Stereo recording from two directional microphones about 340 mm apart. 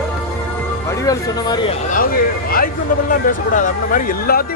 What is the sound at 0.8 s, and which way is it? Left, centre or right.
A man's voice, centre.